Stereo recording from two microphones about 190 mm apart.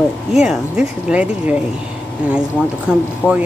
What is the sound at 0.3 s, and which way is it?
Speech, centre (ahead or behind).